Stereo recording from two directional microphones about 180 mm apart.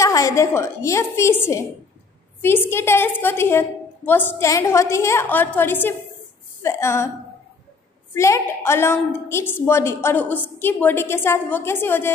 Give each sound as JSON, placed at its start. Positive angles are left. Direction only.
{"t": 0.0, "sound": "a woman's voice", "side_deg": 15}
{"t": 8.1, "sound": "a woman's voice", "side_deg": 15}